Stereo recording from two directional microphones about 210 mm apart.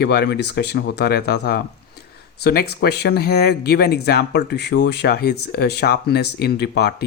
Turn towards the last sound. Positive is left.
turn(degrees=50)  # may be behind; listen again after turning